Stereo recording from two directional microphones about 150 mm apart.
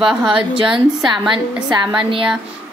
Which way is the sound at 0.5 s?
35° right (ahead or behind).